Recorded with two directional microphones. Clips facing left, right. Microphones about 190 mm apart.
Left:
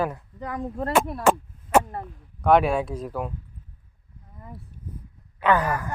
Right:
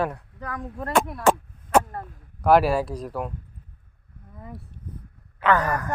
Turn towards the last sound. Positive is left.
turn(degrees=10)  # may be behind; listen again after turning